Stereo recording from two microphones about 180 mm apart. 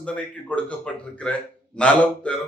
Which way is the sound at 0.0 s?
5° left (ahead or behind).